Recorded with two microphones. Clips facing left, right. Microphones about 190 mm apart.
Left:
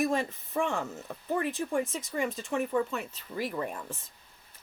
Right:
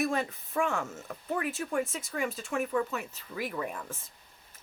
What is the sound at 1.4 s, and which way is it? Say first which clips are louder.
Speech: left 1 dB; 5° right (ahead or behind).